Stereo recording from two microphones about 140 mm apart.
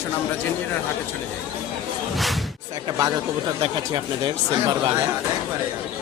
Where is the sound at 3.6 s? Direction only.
35° right (ahead or behind).